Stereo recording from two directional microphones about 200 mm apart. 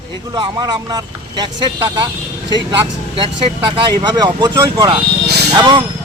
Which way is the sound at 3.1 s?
25° right (ahead or behind).